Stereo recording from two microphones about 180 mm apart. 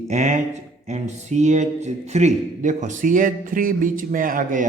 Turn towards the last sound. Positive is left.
turn(degrees=-50)  # may be behind; listen again after turning